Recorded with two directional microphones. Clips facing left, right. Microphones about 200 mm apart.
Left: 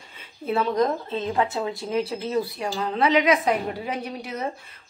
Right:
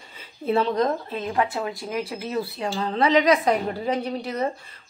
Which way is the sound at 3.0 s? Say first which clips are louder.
Right 1 dB; 35° right (ahead or behind).